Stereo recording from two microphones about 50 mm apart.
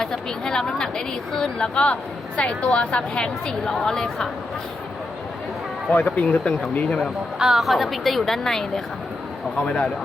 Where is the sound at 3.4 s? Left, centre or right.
Centre.